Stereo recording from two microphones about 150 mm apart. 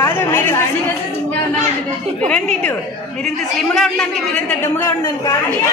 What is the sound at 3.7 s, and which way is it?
Speech, 5° left (ahead or behind).